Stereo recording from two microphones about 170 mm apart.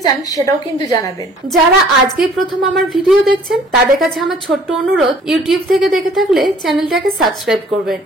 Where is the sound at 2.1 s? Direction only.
Centre (ahead or behind).